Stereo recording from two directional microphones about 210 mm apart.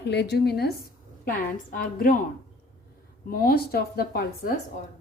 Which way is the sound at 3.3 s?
45° left (ahead or behind).